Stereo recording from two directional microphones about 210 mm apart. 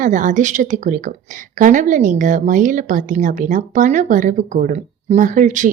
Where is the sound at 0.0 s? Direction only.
35° right (ahead or behind).